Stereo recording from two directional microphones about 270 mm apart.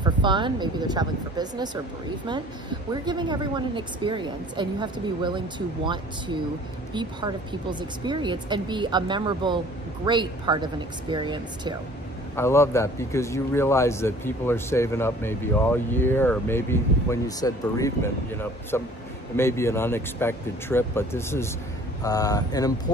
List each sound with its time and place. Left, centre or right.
0.0 s a woman's voice: centre
12.4 s speech: centre